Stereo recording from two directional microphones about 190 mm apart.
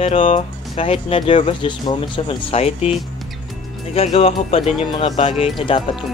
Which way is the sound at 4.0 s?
35° left (ahead or behind).